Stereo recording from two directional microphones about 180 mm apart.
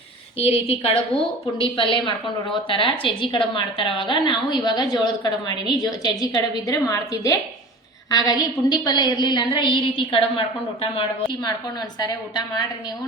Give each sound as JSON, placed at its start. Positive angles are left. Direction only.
{"t": 0.7, "sound": "a woman's voice", "side_deg": 35}